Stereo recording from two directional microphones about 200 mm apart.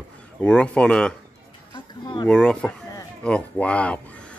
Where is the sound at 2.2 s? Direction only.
5° left (ahead or behind).